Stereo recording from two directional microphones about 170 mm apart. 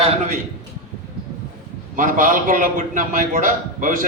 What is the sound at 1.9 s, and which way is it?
A man's voice, 50° right (ahead or behind).